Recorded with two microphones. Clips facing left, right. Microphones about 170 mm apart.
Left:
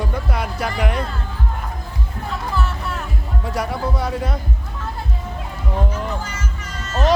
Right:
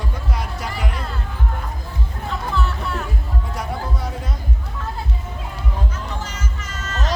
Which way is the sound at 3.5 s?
70° left (ahead or behind).